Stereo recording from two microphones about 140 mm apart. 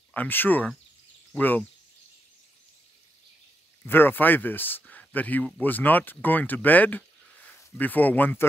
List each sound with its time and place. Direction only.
0.1 s speech: 15° left (ahead or behind)
3.8 s speech: 15° left (ahead or behind)